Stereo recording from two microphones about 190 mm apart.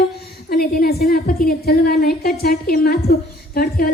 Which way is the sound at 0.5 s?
55° left (ahead or behind).